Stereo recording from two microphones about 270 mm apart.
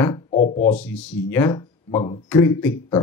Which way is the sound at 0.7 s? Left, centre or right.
Centre.